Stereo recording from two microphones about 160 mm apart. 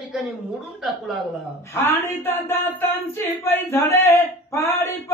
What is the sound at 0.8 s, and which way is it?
Speech, centre (ahead or behind).